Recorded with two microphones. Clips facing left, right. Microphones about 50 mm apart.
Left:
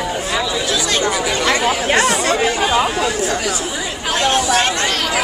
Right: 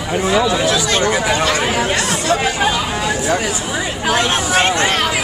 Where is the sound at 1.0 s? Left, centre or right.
Right.